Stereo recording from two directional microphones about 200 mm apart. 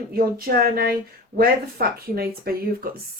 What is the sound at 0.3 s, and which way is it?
Speech, 45° right (ahead or behind).